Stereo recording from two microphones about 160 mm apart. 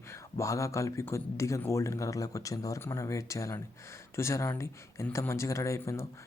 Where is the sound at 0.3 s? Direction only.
20° left (ahead or behind).